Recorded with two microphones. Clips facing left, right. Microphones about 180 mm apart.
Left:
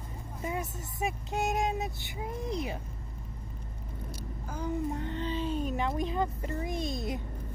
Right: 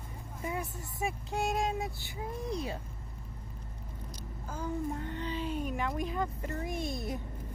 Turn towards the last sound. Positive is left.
turn(degrees=15)  # may be behind; listen again after turning